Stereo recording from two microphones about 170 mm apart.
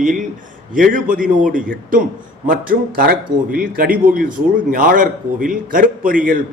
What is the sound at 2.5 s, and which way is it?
A man's voice, 55° right (ahead or behind).